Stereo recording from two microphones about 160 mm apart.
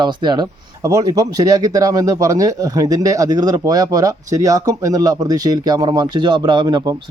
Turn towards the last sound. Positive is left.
turn(degrees=-25)  # may be behind; listen again after turning